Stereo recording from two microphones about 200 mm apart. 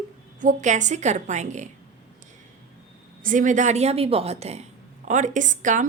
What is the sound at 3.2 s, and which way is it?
A woman's voice, 40° right (ahead or behind).